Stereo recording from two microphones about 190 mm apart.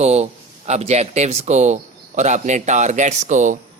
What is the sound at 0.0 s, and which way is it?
A man's voice, 35° right (ahead or behind).